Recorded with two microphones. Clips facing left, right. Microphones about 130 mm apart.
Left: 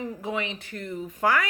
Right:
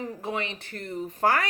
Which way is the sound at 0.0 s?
35° right (ahead or behind).